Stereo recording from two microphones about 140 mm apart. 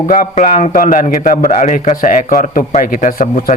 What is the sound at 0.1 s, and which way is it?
A man's voice, 80° left.